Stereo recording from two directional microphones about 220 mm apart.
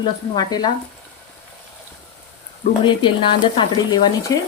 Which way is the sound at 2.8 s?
20° left (ahead or behind).